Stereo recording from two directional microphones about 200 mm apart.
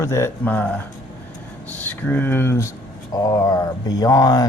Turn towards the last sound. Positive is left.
turn(degrees=20)  # may be behind; listen again after turning